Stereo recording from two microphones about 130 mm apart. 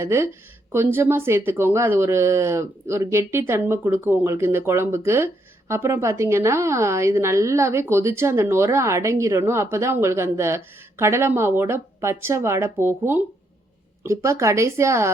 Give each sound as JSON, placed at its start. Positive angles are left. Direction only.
{"t": 0.0, "sound": "speech", "side_deg": -20}